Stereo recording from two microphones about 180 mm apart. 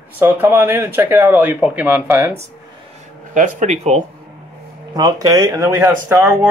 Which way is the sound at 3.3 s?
45° right (ahead or behind).